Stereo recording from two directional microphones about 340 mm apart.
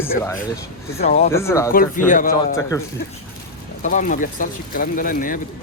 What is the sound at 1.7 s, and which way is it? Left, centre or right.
Speech, left.